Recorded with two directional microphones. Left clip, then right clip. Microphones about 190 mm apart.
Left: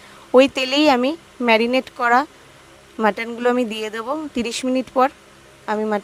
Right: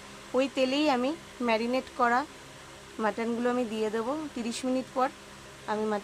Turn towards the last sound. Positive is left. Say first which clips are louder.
# left 9 dB
turn(degrees=40)  # may be behind; listen again after turning